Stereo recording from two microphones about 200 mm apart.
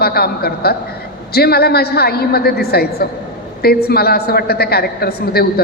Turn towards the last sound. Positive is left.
turn(degrees=50)  # may be behind; listen again after turning